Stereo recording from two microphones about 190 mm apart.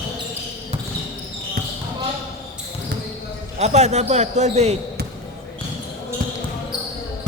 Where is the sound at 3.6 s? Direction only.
35° right (ahead or behind).